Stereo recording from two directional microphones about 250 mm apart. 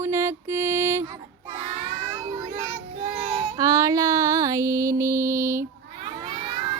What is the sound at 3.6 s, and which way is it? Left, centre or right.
Music, centre.